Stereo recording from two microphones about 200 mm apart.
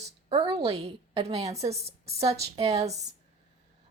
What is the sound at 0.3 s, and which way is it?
A woman's voice, 30° right (ahead or behind).